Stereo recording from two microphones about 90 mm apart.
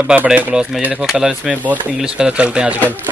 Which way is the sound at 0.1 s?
20° right (ahead or behind).